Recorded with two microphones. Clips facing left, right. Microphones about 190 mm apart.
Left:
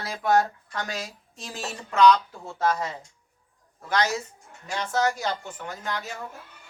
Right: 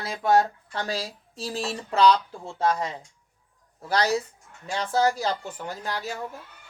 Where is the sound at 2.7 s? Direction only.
15° right (ahead or behind).